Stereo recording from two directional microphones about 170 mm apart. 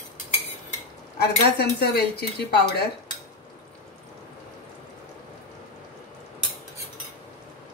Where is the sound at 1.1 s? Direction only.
70° left (ahead or behind).